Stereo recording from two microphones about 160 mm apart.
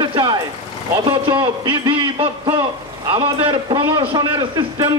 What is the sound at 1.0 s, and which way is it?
A man's voice, 30° right (ahead or behind).